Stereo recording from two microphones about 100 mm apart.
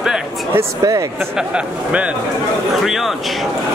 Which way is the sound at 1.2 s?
5° right (ahead or behind).